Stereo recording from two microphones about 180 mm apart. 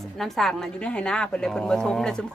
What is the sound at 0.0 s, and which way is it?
A woman's voice, centre (ahead or behind).